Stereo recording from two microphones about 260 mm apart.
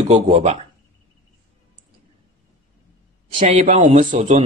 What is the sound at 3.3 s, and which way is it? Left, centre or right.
A man's voice, right.